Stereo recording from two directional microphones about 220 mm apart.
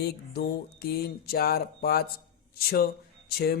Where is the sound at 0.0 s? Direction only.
45° left (ahead or behind).